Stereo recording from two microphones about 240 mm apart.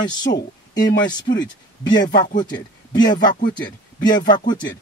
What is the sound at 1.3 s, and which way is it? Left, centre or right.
Speech, left.